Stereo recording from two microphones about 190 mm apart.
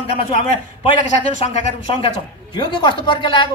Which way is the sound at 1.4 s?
35° left (ahead or behind).